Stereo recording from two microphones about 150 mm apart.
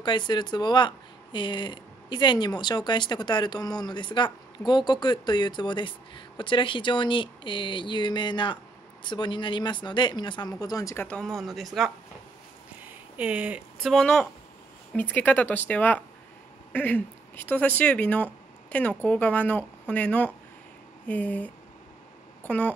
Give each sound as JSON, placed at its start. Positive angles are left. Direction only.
{"t": 0.0, "sound": "speech", "side_deg": 30}
{"t": 11.1, "sound": "speech", "side_deg": 5}
{"t": 12.8, "sound": "a sound", "side_deg": -10}
{"t": 13.9, "sound": "speech", "side_deg": 5}